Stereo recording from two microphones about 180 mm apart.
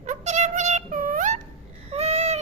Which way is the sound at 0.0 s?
40° right (ahead or behind).